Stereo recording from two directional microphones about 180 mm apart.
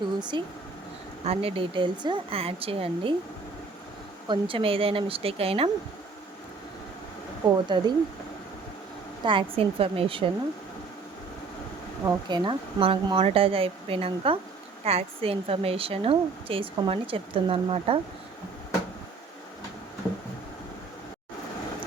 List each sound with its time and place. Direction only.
0.2 s a woman's voice: 25° right (ahead or behind)
4.3 s a woman's voice: 30° right (ahead or behind)
7.7 s speech: 25° right (ahead or behind)
9.2 s a woman's voice: 30° right (ahead or behind)
12.0 s a woman's voice: 25° right (ahead or behind)